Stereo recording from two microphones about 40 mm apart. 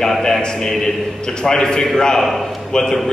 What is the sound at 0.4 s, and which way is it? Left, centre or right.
A man's voice, centre.